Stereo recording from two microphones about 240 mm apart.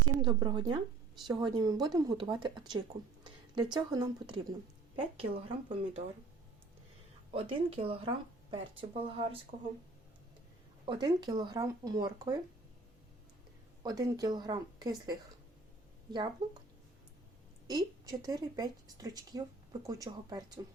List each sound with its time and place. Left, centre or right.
0.2 s a woman's voice: centre
7.3 s speech: right
10.8 s speech: centre
13.8 s speech: centre
16.4 s speech: centre
17.7 s speech: centre